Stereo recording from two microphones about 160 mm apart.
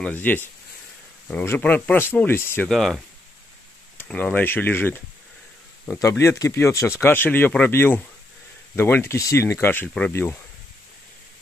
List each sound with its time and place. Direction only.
0.0 s speech: 10° left (ahead or behind)
2.7 s speech: centre (ahead or behind)
4.0 s speech: 10° left (ahead or behind)